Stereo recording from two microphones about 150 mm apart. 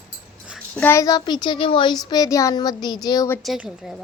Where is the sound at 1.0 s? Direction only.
25° left (ahead or behind).